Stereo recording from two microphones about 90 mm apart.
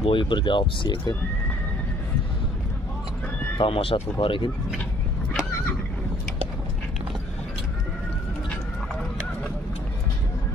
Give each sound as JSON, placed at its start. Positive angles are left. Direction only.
{"t": 0.0, "sound": "speech", "side_deg": 65}
{"t": 3.5, "sound": "speech", "side_deg": 85}